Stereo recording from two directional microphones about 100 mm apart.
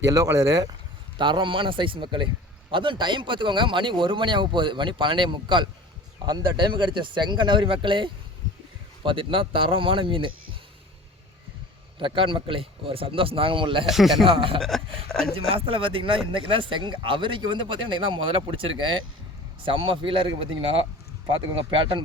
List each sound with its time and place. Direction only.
0.0 s speech: 35° right (ahead or behind)
1.2 s speech: 55° right (ahead or behind)
11.9 s speech: 60° right (ahead or behind)
13.9 s speech: centre (ahead or behind)
14.3 s speech: 60° right (ahead or behind)